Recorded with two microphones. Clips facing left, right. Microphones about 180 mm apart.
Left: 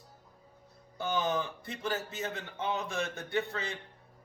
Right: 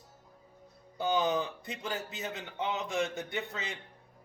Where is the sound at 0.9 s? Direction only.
20° right (ahead or behind).